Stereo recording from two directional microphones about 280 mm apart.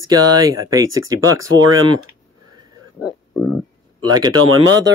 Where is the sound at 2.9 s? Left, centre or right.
Centre.